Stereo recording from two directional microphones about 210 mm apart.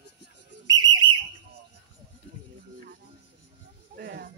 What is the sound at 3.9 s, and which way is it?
Speech, 50° right (ahead or behind).